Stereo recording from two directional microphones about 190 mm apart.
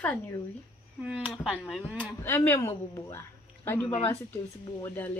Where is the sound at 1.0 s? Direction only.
5° right (ahead or behind).